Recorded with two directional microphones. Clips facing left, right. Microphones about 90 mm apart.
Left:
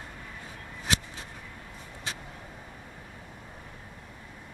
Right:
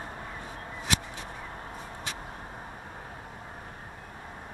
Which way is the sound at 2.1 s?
45° right (ahead or behind).